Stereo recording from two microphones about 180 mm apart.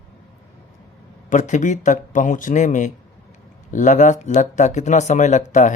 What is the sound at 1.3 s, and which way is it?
Speech, 40° left (ahead or behind).